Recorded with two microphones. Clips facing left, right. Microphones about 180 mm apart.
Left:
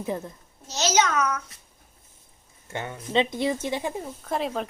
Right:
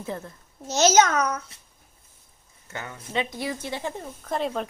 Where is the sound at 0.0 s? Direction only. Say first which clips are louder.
Left 3 dB; 15° left (ahead or behind).